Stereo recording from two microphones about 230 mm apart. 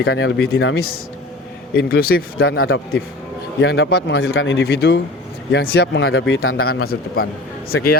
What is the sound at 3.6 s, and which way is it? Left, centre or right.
Speech, left.